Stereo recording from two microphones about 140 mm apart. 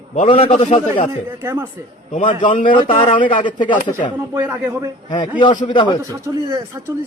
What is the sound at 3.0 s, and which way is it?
Speech, 35° left (ahead or behind).